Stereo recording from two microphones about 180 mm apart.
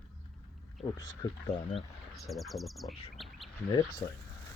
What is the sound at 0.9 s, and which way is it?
Speech, 20° left (ahead or behind).